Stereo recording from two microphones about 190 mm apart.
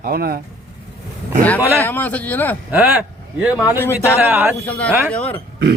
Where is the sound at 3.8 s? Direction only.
15° left (ahead or behind).